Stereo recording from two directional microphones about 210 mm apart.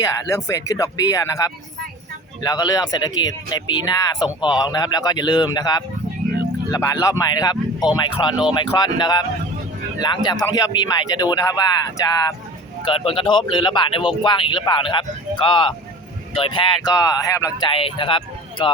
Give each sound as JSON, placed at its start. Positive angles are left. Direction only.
{"t": 0.0, "sound": "speech", "side_deg": 15}
{"t": 12.8, "sound": "speech", "side_deg": 25}